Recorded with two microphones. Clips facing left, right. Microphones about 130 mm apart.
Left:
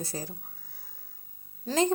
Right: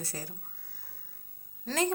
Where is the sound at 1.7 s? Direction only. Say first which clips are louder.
Left 4 dB; 25° left (ahead or behind).